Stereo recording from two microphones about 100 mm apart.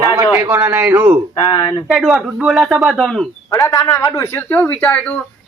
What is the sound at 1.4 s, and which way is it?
Speech, 45° left (ahead or behind).